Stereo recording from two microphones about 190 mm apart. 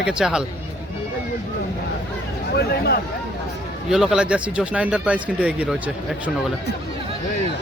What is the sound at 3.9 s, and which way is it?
Speech, 5° right (ahead or behind).